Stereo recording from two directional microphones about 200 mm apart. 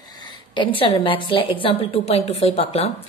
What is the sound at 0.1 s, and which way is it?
A woman's voice, 20° left (ahead or behind).